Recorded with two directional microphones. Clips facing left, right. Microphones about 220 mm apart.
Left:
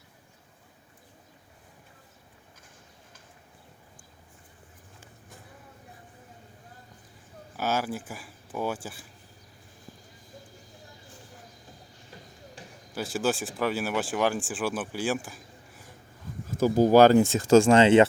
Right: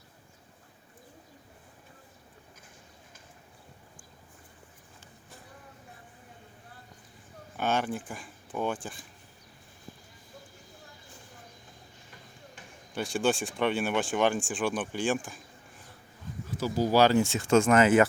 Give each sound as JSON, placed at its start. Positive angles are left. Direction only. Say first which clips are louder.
{"t": 7.5, "sound": "speech", "louder": "even", "side_deg": 5}
{"t": 12.6, "sound": "basketball bounce", "louder": "left 7 dB", "side_deg": 35}
{"t": 12.9, "sound": "speech", "louder": "even", "side_deg": 5}
{"t": 16.5, "sound": "speech", "louder": "left 7 dB", "side_deg": 50}
{"t": 17.5, "sound": "speech", "louder": "left 4 dB", "side_deg": 30}